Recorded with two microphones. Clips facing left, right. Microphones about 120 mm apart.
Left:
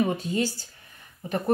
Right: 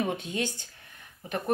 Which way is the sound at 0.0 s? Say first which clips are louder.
Left 5 dB; 5° left (ahead or behind).